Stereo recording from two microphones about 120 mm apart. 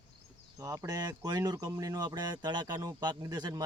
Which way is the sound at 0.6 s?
30° right (ahead or behind).